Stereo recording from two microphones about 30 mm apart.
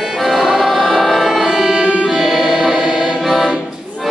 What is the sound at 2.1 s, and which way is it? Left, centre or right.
Music, centre.